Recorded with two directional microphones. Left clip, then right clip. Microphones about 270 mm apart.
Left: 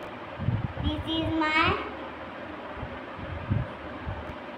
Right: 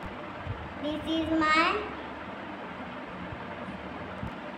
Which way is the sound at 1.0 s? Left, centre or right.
Centre.